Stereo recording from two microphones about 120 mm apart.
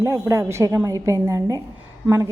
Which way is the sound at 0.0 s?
25° right (ahead or behind).